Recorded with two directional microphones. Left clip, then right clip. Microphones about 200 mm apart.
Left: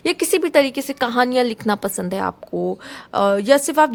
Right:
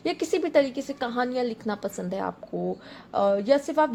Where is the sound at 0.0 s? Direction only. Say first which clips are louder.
Left 7 dB; 35° left (ahead or behind).